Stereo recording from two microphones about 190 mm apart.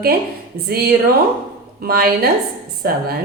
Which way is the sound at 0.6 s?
55° right (ahead or behind).